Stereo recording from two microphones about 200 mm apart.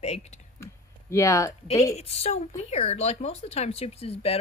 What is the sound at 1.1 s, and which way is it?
Speech, 15° left (ahead or behind).